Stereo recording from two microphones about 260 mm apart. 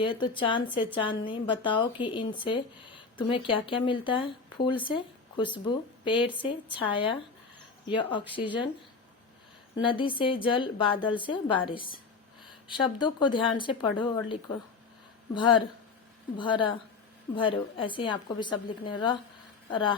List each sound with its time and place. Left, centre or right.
0.0 s a woman's voice: centre
9.8 s a woman's voice: centre
15.4 s a woman's voice: centre